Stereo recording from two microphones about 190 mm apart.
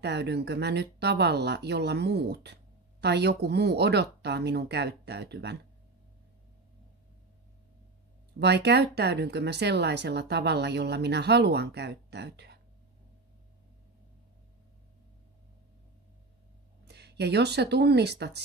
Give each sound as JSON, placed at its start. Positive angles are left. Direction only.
{"t": 0.0, "sound": "speech", "side_deg": -60}
{"t": 8.4, "sound": "speech", "side_deg": -60}
{"t": 16.8, "sound": "speech", "side_deg": -60}